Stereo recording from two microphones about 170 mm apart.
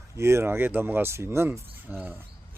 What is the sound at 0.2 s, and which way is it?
Speech, 15° right (ahead or behind).